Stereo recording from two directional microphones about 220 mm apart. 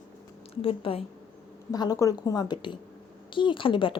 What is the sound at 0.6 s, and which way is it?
A woman's voice, 25° left (ahead or behind).